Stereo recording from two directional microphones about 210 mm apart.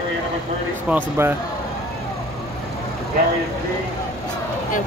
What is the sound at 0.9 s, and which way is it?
Speech, 10° right (ahead or behind).